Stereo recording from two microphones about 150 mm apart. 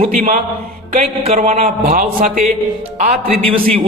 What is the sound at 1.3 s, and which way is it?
Music, 50° right (ahead or behind).